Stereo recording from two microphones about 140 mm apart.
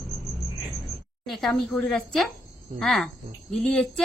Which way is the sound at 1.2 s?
Centre (ahead or behind).